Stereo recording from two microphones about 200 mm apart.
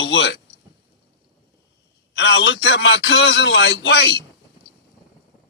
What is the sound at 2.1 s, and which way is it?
Speech, 60° left (ahead or behind).